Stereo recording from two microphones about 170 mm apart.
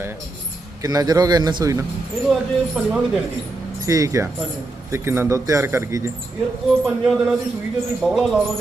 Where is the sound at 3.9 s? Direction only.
20° right (ahead or behind).